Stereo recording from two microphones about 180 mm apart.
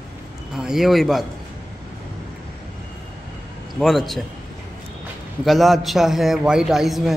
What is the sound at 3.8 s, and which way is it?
Speech, centre (ahead or behind).